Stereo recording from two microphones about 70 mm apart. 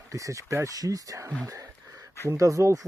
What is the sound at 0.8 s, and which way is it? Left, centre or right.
Speech, right.